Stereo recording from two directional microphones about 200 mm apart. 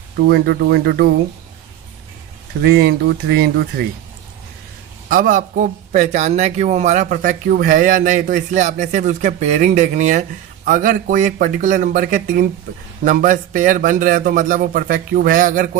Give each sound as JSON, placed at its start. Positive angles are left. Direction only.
{"t": 0.3, "sound": "a man's voice", "side_deg": -55}
{"t": 2.6, "sound": "a man's voice", "side_deg": -50}
{"t": 5.0, "sound": "a man's voice", "side_deg": -45}